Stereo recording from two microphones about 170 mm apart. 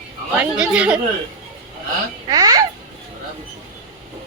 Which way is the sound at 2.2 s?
20° right (ahead or behind).